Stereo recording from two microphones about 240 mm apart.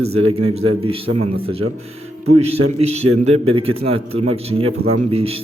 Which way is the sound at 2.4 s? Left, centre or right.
Right.